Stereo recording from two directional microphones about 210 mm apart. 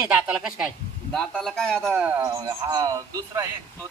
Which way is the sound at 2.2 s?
20° right (ahead or behind).